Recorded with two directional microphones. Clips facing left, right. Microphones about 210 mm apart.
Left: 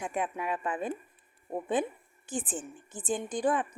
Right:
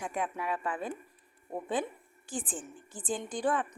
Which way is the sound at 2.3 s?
20° left (ahead or behind).